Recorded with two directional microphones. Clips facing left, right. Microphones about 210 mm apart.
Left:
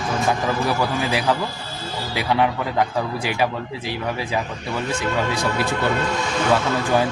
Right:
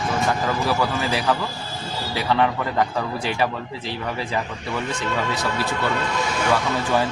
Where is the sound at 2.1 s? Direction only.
15° left (ahead or behind).